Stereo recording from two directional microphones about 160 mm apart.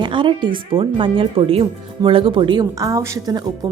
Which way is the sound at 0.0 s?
30° right (ahead or behind).